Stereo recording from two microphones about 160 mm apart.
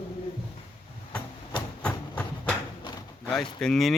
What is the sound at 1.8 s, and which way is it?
Train, 10° left (ahead or behind).